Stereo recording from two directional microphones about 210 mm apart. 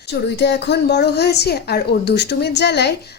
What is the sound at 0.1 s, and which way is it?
A woman's voice, 55° left (ahead or behind).